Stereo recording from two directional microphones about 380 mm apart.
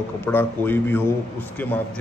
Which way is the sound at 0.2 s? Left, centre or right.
Centre.